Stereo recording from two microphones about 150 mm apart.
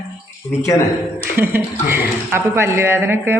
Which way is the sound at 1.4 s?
15° right (ahead or behind).